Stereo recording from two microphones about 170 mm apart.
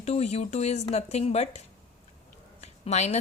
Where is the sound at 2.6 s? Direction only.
40° left (ahead or behind).